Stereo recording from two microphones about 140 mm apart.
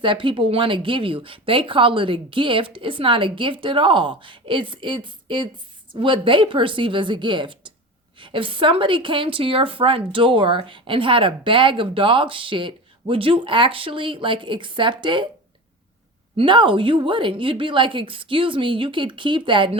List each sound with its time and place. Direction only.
0.0 s speech: 35° right (ahead or behind)
16.4 s speech: 35° right (ahead or behind)